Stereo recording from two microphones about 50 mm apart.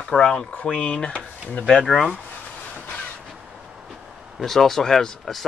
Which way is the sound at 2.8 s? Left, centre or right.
Left.